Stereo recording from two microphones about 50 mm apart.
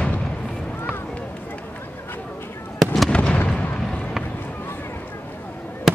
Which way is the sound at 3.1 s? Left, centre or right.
Left.